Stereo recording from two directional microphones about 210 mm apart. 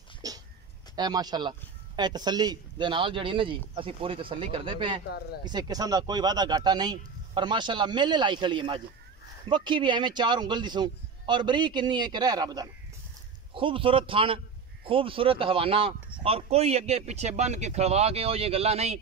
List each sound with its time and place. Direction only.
0.2 s dog: 15° right (ahead or behind)
0.9 s speech: 20° right (ahead or behind)
5.0 s speech: 50° left (ahead or behind)
5.4 s speech: 20° right (ahead or behind)